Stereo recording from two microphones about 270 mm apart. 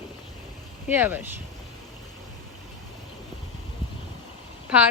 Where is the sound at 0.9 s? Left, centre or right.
Centre.